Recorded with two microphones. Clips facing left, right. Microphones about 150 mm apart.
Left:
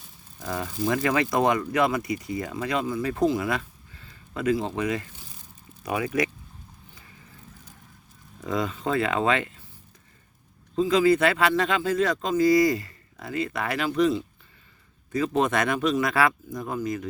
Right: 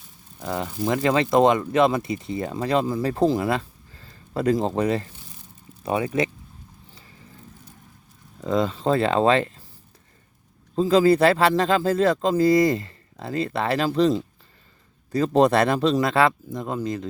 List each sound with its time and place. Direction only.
0.4 s speech: 20° right (ahead or behind)
8.4 s speech: 25° right (ahead or behind)
10.8 s speech: 35° right (ahead or behind)